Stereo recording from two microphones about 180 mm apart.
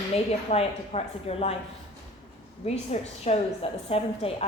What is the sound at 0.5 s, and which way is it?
A woman's voice, 35° left (ahead or behind).